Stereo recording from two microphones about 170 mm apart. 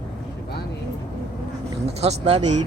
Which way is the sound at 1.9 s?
35° right (ahead or behind).